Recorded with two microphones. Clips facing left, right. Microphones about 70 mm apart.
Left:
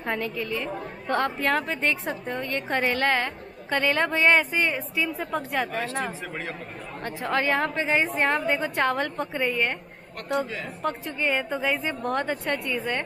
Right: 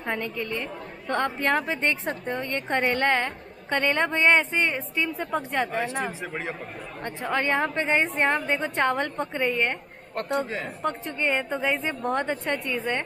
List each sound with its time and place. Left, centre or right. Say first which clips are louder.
0.0 s a woman's voice: left 1 dB; centre
7.0 s a woman's voice: left 1 dB; centre
7.2 s a woman's voice: even; centre
10.1 s a man's voice: right 1 dB; right
10.8 s a woman's voice: left 1 dB; centre